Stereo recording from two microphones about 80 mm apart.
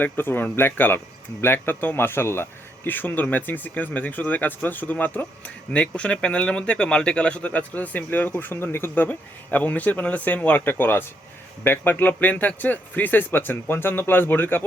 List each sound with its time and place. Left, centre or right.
0.0 s speech: left
9.0 s speech: centre